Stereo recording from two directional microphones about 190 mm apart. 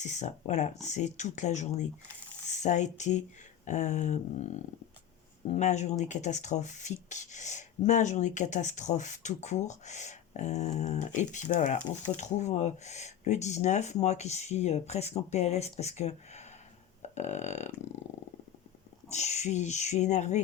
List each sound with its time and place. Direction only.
0.0 s speech: 40° left (ahead or behind)
17.0 s a sound: 35° left (ahead or behind)
19.1 s speech: 35° left (ahead or behind)